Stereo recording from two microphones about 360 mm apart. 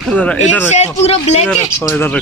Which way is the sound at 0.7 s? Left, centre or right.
Centre.